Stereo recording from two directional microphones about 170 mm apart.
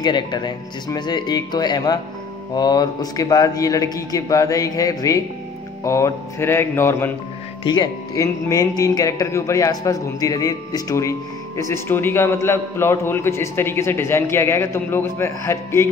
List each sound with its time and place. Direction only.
0.0 s a man's voice: 25° left (ahead or behind)
7.6 s speech: 25° left (ahead or behind)